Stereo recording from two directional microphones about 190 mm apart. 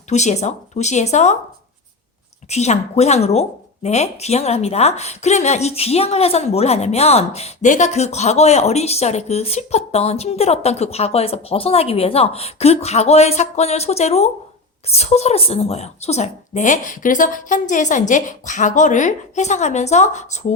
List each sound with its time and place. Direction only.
0.1 s a woman's voice: 35° left (ahead or behind)
2.5 s a woman's voice: 35° left (ahead or behind)